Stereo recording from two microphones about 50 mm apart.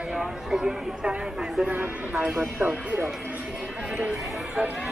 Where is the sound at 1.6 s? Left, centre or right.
Right.